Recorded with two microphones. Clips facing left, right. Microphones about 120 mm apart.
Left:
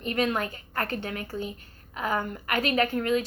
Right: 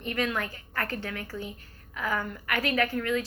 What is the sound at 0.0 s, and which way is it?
A woman's voice, 25° left (ahead or behind).